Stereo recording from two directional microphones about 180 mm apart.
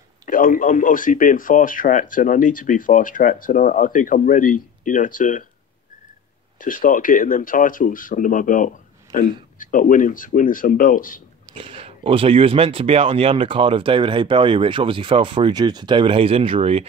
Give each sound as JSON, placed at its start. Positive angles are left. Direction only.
{"t": 0.2, "sound": "a man's voice", "side_deg": 50}
{"t": 6.6, "sound": "a man's voice", "side_deg": 50}
{"t": 11.5, "sound": "speech", "side_deg": -30}